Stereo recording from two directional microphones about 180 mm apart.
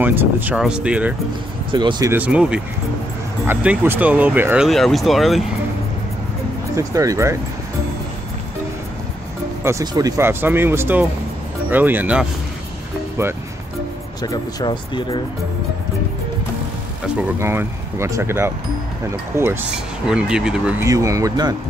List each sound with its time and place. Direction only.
0.0 s speech: 10° right (ahead or behind)
1.7 s speech: 25° right (ahead or behind)
2.1 s speech: 5° right (ahead or behind)
4.6 s speech: centre (ahead or behind)
6.7 s speech: 20° right (ahead or behind)
9.6 s speech: 15° right (ahead or behind)
14.2 s speech: 25° left (ahead or behind)
17.2 s speech: 15° right (ahead or behind)
20.8 s speech: 15° right (ahead or behind)